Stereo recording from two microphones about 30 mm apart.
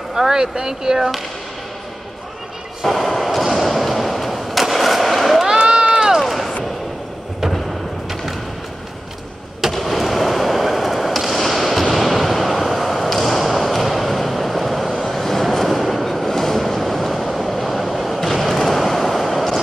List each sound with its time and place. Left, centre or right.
0.1 s speech: centre
2.8 s artillery fire: centre
4.7 s gunshot: centre
5.9 s run: right
6.2 s a sound: centre
9.6 s fireworks: centre
11.9 s a sound: centre
15.0 s train: centre
18.2 s skateboard: centre